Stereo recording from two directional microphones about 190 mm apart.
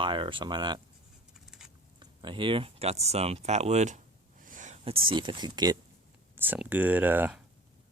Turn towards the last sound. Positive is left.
turn(degrees=-10)  # may be behind; listen again after turning